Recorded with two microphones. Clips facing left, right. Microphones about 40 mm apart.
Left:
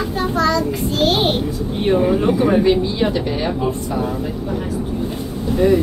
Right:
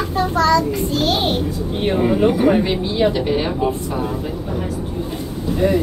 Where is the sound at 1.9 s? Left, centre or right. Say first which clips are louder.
Left 1 dB; centre.